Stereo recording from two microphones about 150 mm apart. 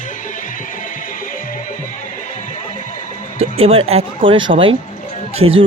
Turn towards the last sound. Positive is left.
turn(degrees=-40)  # may be behind; listen again after turning